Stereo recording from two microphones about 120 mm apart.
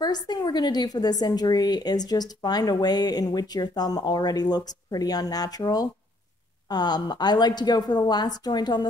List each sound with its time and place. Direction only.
0.0 s a woman's voice: 35° left (ahead or behind)